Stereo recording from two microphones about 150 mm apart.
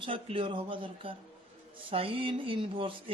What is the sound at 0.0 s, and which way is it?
Speech, 35° right (ahead or behind).